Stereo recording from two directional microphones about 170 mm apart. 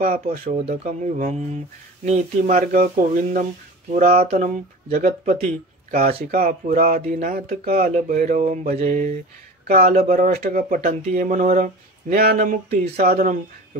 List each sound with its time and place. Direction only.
0.5 s speech: 35° right (ahead or behind)
0.8 s speech: 50° right (ahead or behind)
4.3 s speech: 40° right (ahead or behind)
6.3 s speech: 60° right (ahead or behind)